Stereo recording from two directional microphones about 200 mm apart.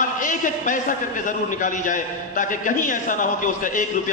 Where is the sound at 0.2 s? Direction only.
40° left (ahead or behind).